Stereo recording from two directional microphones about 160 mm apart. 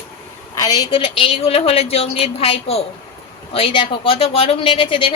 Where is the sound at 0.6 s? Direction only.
25° left (ahead or behind).